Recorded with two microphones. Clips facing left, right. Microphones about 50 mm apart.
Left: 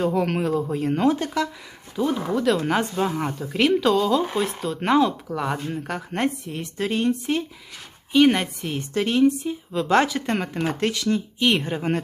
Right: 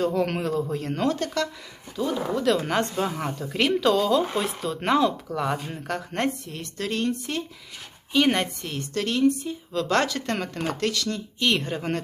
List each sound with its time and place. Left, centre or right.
0.0 s a woman's voice: centre
2.3 s a woman's voice: centre
8.1 s speech: centre
8.7 s a woman's voice: centre